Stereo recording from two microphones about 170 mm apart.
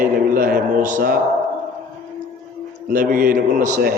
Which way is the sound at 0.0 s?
60° right (ahead or behind).